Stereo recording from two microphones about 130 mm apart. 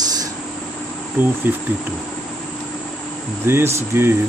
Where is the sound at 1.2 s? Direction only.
15° right (ahead or behind).